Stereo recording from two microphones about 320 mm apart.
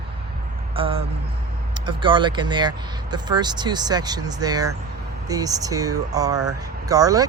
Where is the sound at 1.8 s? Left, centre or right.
Centre.